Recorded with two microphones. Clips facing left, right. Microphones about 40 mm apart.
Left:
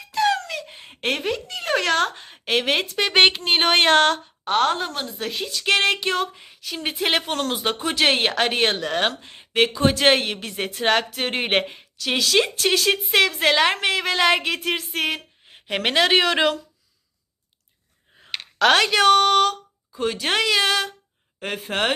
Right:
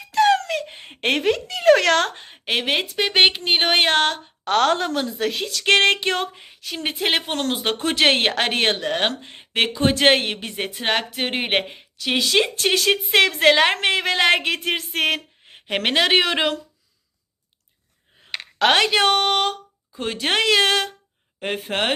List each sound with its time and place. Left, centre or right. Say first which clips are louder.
0.1 s a sound: right 4 dB; right
1.5 s speech: right 8 dB; right
2.2 s a sound: left 1 dB; right
2.6 s speech: even; centre
4.4 s a woman's voice: right 2 dB; right
5.2 s speech: even; right
7.0 s speech: even; centre
7.3 s speech: right 1 dB; right
10.4 s speech: left 2 dB; right; by 11.9 s centre
11.9 s speech: right 1 dB; right
15.8 s speech: even; right
18.6 s a woman's voice: left 1 dB; right
21.7 s speech: left 1 dB; right